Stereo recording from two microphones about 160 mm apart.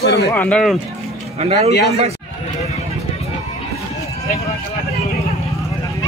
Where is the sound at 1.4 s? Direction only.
40° right (ahead or behind).